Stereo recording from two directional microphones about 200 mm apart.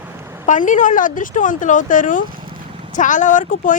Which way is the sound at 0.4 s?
40° left (ahead or behind).